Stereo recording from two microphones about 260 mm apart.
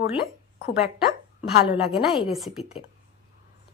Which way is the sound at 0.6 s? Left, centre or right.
Left.